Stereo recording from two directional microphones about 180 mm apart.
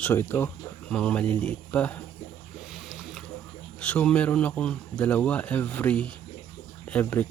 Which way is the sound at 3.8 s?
10° left (ahead or behind).